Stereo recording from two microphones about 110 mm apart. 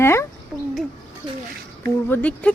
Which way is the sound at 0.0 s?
25° left (ahead or behind).